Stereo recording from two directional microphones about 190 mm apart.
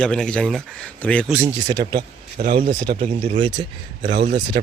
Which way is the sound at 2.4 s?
50° right (ahead or behind).